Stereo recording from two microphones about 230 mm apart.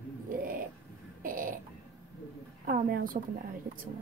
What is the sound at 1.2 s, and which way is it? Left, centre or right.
Burping, right.